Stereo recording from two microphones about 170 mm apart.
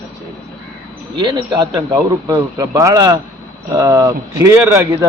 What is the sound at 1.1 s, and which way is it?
A man's voice, 25° right (ahead or behind).